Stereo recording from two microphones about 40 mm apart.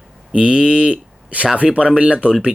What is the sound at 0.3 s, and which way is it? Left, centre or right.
Speech, right.